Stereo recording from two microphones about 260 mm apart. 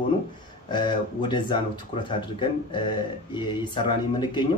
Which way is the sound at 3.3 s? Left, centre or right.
Centre.